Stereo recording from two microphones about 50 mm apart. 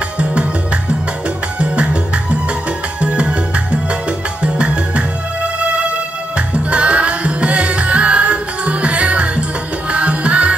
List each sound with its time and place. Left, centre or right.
0.2 s music: right
3.0 s music: right
6.3 s music: right